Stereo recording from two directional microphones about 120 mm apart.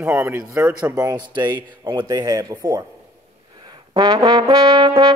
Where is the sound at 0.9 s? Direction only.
30° right (ahead or behind).